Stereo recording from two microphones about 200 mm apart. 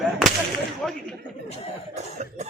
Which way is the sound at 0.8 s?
Centre (ahead or behind).